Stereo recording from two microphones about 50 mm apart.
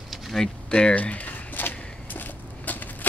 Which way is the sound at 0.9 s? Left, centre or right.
Left.